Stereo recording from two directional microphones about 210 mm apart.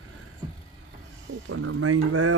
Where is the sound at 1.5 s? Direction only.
85° right.